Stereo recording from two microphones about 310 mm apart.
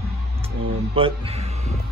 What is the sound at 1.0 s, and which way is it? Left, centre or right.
Speech, centre.